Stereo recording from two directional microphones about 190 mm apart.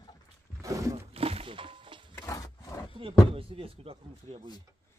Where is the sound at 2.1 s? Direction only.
15° left (ahead or behind).